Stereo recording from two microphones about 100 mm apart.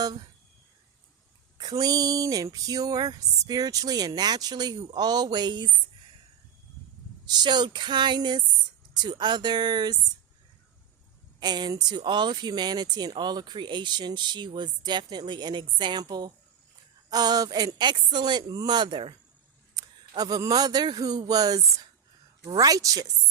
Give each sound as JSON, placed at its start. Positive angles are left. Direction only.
{"t": 1.5, "sound": "speech", "side_deg": -40}
{"t": 7.3, "sound": "speech", "side_deg": -45}
{"t": 11.3, "sound": "a man's voice", "side_deg": -45}